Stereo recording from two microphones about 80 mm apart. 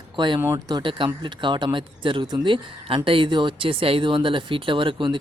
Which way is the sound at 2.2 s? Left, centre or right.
Right.